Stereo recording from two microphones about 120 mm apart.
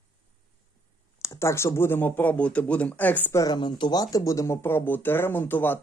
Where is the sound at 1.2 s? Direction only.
25° left (ahead or behind).